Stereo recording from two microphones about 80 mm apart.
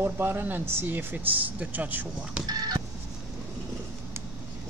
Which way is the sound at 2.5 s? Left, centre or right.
Right.